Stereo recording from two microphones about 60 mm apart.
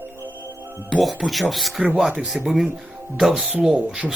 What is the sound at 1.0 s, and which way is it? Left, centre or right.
Speech, centre.